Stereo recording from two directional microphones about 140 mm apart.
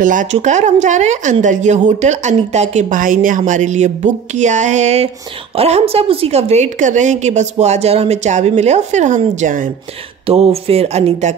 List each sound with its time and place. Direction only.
0.0 s a woman's voice: 70° right (ahead or behind)
10.2 s a woman's voice: 45° right (ahead or behind)